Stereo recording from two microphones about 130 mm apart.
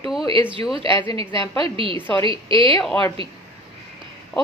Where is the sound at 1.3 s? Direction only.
40° right (ahead or behind).